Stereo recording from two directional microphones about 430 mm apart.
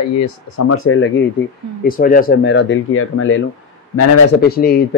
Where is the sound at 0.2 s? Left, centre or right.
Left.